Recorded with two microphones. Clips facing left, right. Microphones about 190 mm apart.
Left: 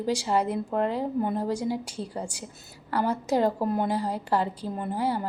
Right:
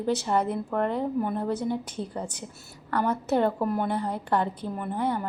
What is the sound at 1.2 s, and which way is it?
Speech, 30° left (ahead or behind).